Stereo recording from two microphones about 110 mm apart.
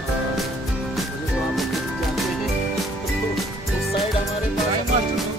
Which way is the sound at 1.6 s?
Centre (ahead or behind).